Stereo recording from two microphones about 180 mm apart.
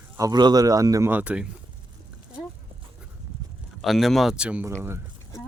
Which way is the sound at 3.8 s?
Centre (ahead or behind).